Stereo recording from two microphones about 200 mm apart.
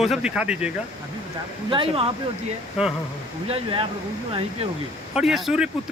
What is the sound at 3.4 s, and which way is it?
Speech, 30° right (ahead or behind).